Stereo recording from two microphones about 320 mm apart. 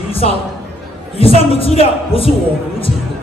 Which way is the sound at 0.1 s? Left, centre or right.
Centre.